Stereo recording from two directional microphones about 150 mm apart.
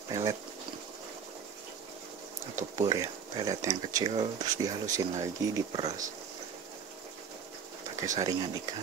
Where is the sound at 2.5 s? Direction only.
45° right (ahead or behind).